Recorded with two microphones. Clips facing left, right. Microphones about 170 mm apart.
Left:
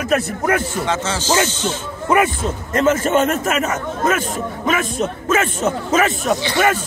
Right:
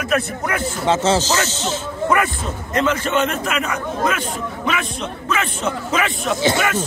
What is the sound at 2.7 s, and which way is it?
A man's voice, 45° left (ahead or behind).